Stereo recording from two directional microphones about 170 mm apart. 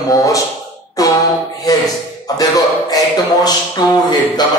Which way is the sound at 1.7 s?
20° left (ahead or behind).